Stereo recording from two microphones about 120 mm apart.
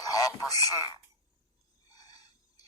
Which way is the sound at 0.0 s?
30° left (ahead or behind).